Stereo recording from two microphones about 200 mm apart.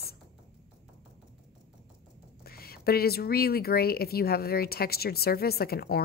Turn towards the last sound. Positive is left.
turn(degrees=50)  # may be behind; listen again after turning